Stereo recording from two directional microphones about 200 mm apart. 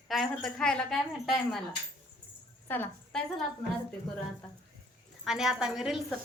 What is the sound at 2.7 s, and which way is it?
Speech, 10° left (ahead or behind).